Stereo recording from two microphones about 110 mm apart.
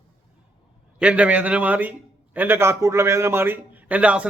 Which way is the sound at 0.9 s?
10° right (ahead or behind).